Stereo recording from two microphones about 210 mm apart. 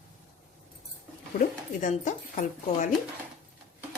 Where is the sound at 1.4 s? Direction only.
35° left (ahead or behind).